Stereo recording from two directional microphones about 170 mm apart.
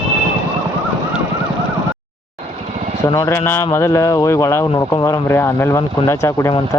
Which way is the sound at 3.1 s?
20° left (ahead or behind).